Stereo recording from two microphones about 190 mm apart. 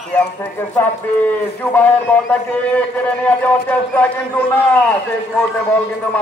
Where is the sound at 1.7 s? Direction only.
10° left (ahead or behind).